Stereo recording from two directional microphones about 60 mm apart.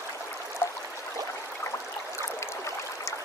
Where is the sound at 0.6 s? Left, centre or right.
Left.